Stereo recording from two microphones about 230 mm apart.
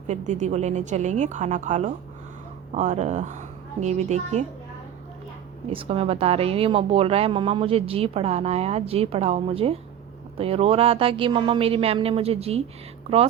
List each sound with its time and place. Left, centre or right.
0.1 s a woman's voice: right
5.7 s a woman's voice: right